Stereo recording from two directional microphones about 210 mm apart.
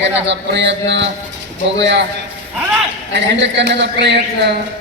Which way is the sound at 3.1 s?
55° right (ahead or behind).